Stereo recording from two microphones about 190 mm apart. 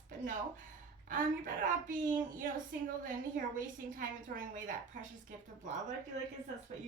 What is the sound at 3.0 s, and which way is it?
A woman's voice, 45° right (ahead or behind).